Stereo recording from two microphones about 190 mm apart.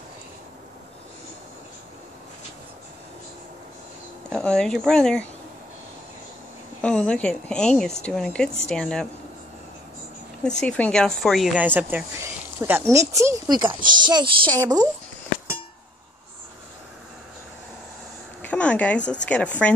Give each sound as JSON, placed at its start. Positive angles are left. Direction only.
{"t": 4.3, "sound": "speech", "side_deg": 5}
{"t": 6.8, "sound": "speech", "side_deg": 5}
{"t": 10.4, "sound": "speech", "side_deg": 5}
{"t": 18.4, "sound": "a sound", "side_deg": 5}
{"t": 19.2, "sound": "speech", "side_deg": 5}